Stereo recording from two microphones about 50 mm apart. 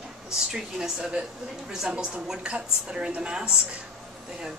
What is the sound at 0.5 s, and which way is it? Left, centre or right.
A woman's voice, centre.